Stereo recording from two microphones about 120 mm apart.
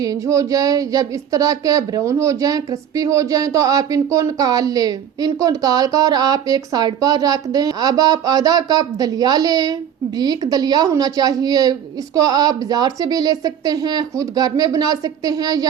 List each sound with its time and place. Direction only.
0.0 s speech: 30° right (ahead or behind)